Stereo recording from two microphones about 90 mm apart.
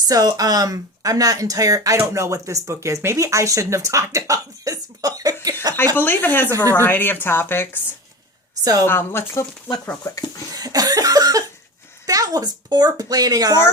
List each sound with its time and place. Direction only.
0.0 s speech: 45° right (ahead or behind)
5.7 s speech: 25° left (ahead or behind)
8.9 s speech: 25° left (ahead or behind)
10.5 s cough: 45° right (ahead or behind)
12.0 s speech: 40° right (ahead or behind)